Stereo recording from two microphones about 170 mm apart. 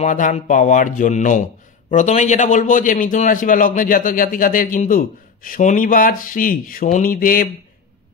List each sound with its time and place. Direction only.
0.0 s speech: 45° left (ahead or behind)